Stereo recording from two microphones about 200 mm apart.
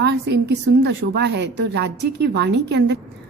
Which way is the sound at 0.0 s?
55° right (ahead or behind).